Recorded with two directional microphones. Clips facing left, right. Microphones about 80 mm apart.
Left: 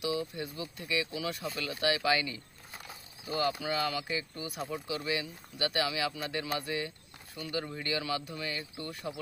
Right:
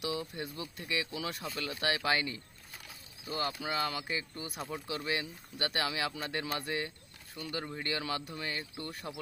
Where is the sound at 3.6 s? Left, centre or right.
Right.